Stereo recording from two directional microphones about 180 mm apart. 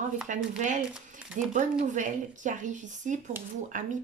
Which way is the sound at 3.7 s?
45° right (ahead or behind).